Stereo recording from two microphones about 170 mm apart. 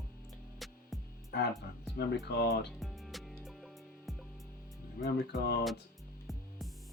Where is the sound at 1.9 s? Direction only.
75° left (ahead or behind).